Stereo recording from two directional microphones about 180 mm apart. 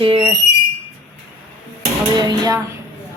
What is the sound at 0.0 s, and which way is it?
Speech, 30° right (ahead or behind).